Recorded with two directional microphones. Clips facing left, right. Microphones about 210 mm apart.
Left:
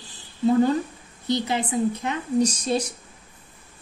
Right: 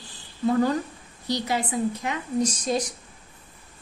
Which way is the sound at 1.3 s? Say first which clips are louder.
Left 2 dB; 25° left (ahead or behind).